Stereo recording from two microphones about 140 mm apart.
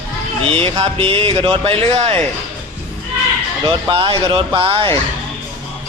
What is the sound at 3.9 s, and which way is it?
Speech, 35° right (ahead or behind).